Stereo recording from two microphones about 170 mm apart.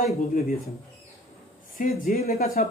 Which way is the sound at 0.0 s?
50° left (ahead or behind).